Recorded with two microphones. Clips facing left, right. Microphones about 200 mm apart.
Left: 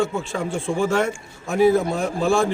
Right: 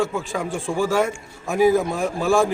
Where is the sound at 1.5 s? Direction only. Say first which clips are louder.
Left 1 dB; 10° right (ahead or behind).